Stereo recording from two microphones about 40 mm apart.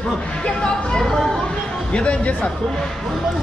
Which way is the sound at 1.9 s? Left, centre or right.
Left.